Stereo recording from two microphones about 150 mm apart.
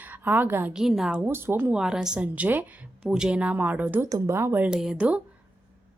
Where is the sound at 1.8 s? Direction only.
5° right (ahead or behind).